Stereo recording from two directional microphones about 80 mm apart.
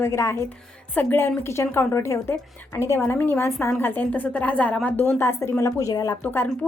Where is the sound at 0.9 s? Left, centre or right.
Left.